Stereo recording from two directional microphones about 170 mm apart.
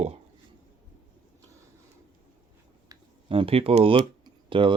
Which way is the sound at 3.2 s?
35° right (ahead or behind).